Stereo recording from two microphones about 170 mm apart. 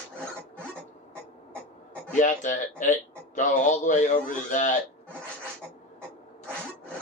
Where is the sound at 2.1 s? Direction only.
50° left (ahead or behind).